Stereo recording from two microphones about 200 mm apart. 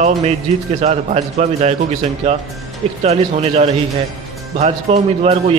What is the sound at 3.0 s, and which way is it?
A man's voice, 30° right (ahead or behind).